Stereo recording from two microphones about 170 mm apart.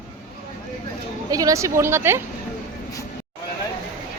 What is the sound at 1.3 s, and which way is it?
Speech, 20° right (ahead or behind).